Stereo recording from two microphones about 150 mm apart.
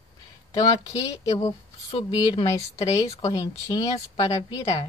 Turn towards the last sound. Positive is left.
turn(degrees=25)  # may be behind; listen again after turning